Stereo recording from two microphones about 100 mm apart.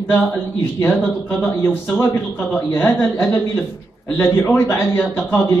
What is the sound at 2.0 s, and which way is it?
A man's voice, 25° left (ahead or behind).